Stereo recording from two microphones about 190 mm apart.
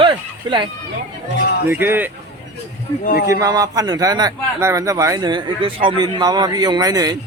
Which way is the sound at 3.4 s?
20° right (ahead or behind).